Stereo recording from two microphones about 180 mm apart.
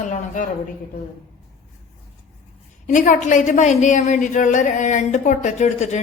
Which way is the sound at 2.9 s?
45° left (ahead or behind).